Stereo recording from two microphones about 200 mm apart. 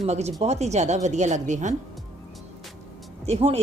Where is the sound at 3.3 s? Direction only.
30° right (ahead or behind).